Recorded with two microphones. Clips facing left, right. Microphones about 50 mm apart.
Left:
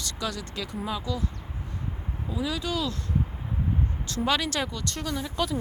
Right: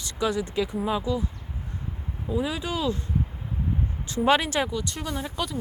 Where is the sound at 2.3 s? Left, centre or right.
Right.